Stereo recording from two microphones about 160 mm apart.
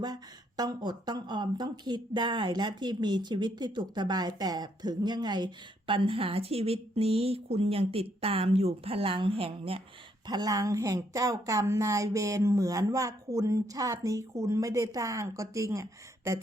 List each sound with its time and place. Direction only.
0.0 s speech: 25° right (ahead or behind)
10.2 s speech: 25° right (ahead or behind)